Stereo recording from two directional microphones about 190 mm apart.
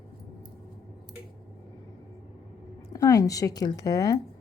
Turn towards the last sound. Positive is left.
turn(degrees=20)  # may be behind; listen again after turning